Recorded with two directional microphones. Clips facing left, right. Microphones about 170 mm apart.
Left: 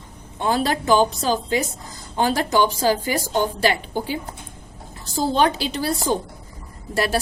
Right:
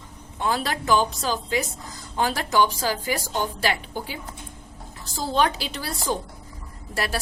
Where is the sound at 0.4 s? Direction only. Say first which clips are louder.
Left 4 dB; 30° left (ahead or behind).